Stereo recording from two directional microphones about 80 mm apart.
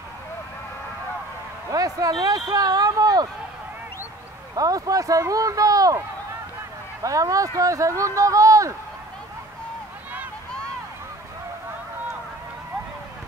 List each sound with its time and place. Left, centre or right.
1.7 s speech: right
4.6 s speech: right